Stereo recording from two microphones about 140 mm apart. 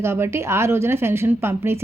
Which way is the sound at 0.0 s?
20° right (ahead or behind).